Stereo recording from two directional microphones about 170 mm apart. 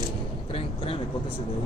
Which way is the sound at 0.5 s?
35° left (ahead or behind).